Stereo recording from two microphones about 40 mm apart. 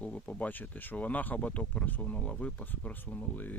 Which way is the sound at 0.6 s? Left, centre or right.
Left.